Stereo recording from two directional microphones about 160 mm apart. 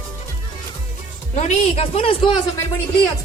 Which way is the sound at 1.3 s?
40° left (ahead or behind).